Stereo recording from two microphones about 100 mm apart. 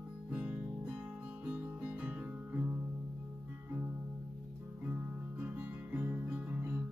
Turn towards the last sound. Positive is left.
turn(degrees=-20)  # may be behind; listen again after turning